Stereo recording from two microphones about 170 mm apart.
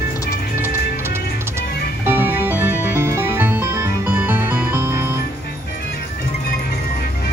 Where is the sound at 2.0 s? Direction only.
10° right (ahead or behind).